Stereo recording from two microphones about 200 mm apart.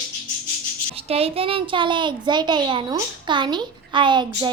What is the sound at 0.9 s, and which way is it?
A child's voice, 30° right (ahead or behind).